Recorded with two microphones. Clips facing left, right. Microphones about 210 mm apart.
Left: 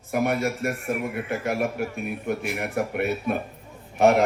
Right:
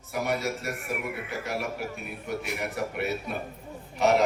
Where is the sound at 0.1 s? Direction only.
55° left (ahead or behind).